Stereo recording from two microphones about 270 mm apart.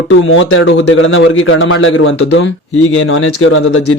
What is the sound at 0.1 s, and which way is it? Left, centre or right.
Speech, left.